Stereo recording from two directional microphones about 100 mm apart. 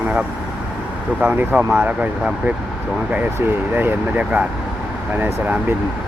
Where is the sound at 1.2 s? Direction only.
20° right (ahead or behind).